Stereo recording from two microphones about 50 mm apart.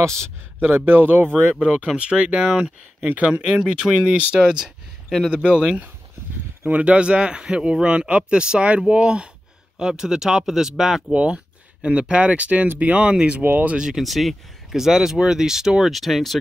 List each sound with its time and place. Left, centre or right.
0.6 s speech: right
1.9 s speech: right
5.3 s speech: right
6.6 s speech: right
11.1 s speech: right
13.1 s speech: centre
13.4 s speech: right
13.7 s speech: centre
14.0 s speech: centre